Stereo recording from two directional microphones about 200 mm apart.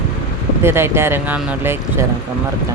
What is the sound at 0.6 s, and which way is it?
Speech, 10° right (ahead or behind).